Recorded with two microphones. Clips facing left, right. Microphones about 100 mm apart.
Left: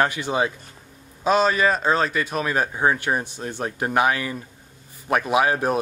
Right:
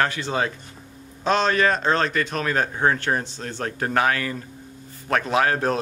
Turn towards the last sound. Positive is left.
turn(degrees=10)  # may be behind; listen again after turning